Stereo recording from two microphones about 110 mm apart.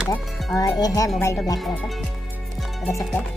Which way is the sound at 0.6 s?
35° left (ahead or behind).